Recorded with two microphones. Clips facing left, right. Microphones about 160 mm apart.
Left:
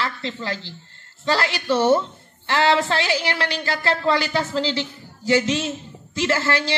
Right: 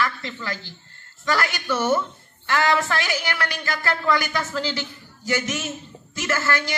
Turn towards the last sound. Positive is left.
turn(degrees=30)  # may be behind; listen again after turning